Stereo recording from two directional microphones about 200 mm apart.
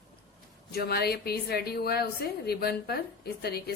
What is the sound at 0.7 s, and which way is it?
A woman's voice, 50° left (ahead or behind).